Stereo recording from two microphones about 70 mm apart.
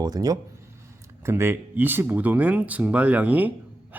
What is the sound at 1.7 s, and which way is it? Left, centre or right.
Speech, right.